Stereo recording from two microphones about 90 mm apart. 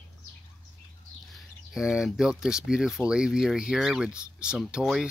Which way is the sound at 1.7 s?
5° right (ahead or behind).